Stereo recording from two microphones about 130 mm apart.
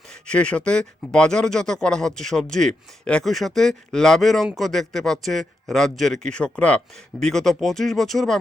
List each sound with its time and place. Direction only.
0.1 s speech: 10° left (ahead or behind)